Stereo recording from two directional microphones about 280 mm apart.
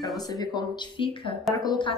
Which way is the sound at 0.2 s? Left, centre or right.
Centre.